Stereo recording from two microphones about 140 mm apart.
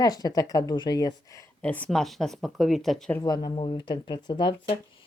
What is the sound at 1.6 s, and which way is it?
Speech, 10° left (ahead or behind).